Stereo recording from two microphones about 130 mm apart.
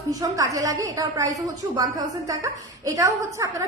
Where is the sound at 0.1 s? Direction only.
25° right (ahead or behind).